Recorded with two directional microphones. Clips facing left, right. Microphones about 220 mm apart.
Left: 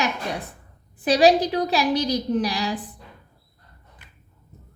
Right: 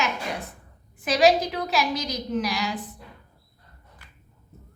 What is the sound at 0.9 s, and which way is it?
A woman's voice, 35° left (ahead or behind).